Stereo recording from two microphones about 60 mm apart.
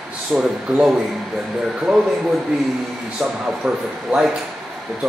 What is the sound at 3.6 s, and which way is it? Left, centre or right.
Speech, centre.